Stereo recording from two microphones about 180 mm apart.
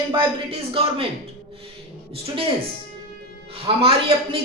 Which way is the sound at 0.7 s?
30° right (ahead or behind).